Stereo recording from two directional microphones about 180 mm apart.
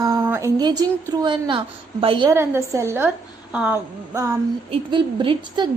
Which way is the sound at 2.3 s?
15° right (ahead or behind).